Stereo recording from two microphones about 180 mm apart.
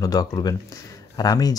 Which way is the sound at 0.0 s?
20° left (ahead or behind).